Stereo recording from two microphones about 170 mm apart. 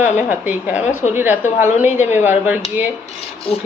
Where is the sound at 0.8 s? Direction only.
45° left (ahead or behind).